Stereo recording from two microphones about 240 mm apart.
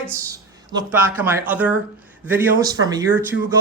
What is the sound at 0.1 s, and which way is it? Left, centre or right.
A man's voice, centre.